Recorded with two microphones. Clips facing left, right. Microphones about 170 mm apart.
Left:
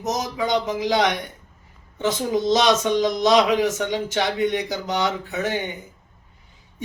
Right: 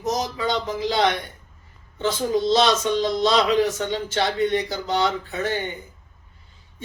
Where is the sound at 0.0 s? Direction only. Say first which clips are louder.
Even; 20° left (ahead or behind).